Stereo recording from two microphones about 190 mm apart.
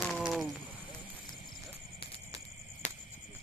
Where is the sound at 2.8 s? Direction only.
35° left (ahead or behind).